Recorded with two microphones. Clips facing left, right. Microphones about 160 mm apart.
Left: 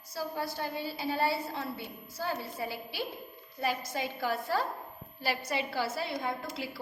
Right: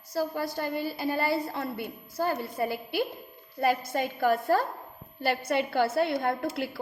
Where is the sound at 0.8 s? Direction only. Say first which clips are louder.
Even; 55° right (ahead or behind).